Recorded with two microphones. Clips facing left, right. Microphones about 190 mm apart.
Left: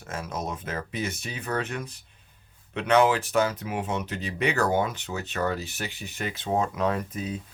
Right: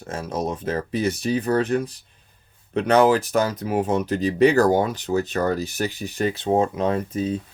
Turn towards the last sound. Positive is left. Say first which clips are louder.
# right 7 dB
turn(degrees=-30)  # may be behind; listen again after turning